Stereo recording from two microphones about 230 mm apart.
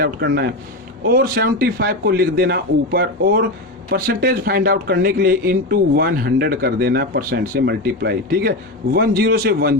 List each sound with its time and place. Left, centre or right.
0.0 s a man's voice: right